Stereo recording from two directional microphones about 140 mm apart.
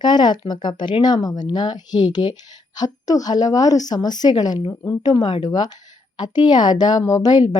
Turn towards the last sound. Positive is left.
turn(degrees=30)  # may be behind; listen again after turning